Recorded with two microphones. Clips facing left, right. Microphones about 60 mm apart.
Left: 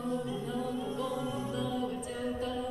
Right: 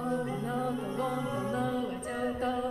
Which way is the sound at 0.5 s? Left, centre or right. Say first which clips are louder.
Right 2 dB; right.